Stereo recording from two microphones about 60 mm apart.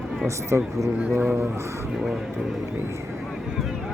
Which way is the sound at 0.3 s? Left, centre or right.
Right.